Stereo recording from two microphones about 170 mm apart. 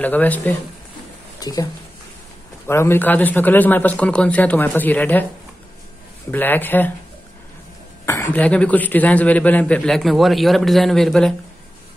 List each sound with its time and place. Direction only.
0.0 s a man's voice: 10° left (ahead or behind)
1.4 s a man's voice: 20° left (ahead or behind)
6.3 s a man's voice: 10° left (ahead or behind)
8.0 s a man's voice: 15° left (ahead or behind)